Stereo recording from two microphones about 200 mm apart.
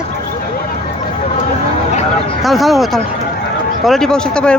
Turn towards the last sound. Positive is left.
turn(degrees=5)  # may be behind; listen again after turning